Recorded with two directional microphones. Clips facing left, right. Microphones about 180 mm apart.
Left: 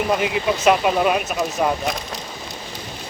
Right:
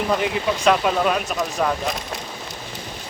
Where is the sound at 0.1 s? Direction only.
5° left (ahead or behind).